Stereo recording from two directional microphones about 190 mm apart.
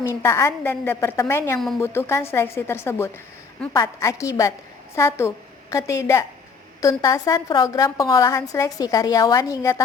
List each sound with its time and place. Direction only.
0.0 s a woman's voice: 15° left (ahead or behind)